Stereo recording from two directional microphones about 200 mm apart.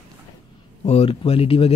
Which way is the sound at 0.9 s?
30° left (ahead or behind).